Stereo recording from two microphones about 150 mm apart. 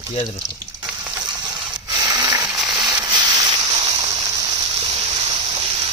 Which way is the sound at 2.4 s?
Centre (ahead or behind).